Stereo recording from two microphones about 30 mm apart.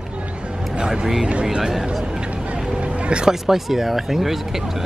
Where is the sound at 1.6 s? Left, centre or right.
Centre.